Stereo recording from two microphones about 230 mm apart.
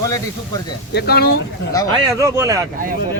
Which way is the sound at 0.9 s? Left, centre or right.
Left.